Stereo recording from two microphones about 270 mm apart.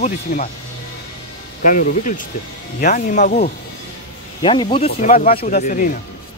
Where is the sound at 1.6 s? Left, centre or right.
Left.